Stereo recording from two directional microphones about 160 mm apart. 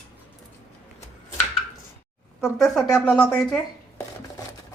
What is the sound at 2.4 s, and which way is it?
A woman's voice, centre (ahead or behind).